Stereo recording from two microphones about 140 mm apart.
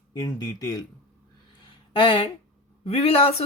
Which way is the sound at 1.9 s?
40° left (ahead or behind).